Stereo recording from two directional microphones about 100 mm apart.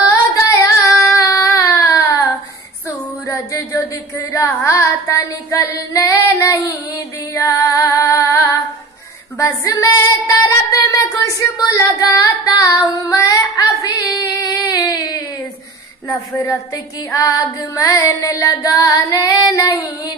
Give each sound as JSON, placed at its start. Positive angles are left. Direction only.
{"t": 0.3, "sound": "female singing", "side_deg": 35}
{"t": 1.6, "sound": "a sound", "side_deg": 30}
{"t": 3.3, "sound": "child singing", "side_deg": 30}
{"t": 7.3, "sound": "music", "side_deg": 30}
{"t": 9.4, "sound": "child singing", "side_deg": 30}
{"t": 10.7, "sound": "a sound", "side_deg": 35}
{"t": 16.1, "sound": "child singing", "side_deg": 30}